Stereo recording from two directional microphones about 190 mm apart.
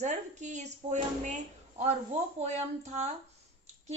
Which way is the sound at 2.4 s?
35° right (ahead or behind).